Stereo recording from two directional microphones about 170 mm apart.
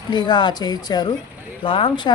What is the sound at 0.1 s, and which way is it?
A woman's voice, 25° left (ahead or behind).